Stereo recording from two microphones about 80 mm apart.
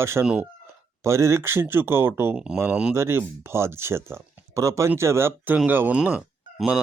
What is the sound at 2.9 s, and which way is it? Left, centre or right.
Speech, right.